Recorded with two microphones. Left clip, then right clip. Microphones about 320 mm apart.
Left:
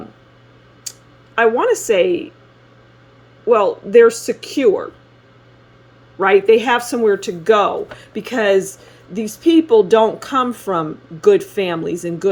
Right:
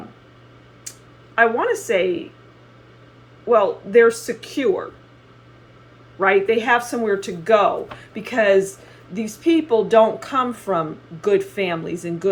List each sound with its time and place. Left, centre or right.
1.4 s speech: left
3.5 s speech: left
6.1 s speech: left